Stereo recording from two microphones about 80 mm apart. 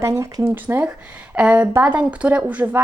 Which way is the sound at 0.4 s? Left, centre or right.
Right.